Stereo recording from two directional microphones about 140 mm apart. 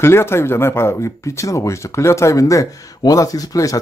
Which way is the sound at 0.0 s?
15° left (ahead or behind).